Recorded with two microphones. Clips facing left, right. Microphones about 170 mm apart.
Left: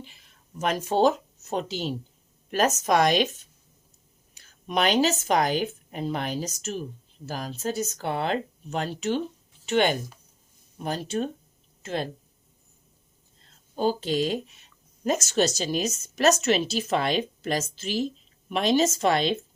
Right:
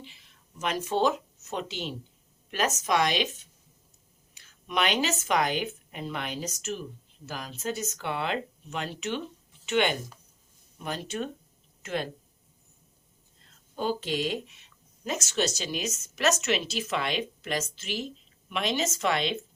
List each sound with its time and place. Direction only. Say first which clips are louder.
0.0 s a woman's voice: left 3 dB; 50° left (ahead or behind)
4.4 s speech: left 3 dB; 40° left (ahead or behind)
13.7 s speech: left 5 dB; 35° left (ahead or behind)